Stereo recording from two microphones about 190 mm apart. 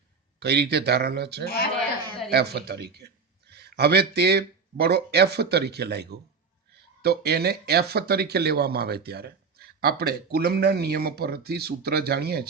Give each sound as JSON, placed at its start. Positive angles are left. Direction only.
{"t": 0.3, "sound": "a man's voice", "side_deg": -60}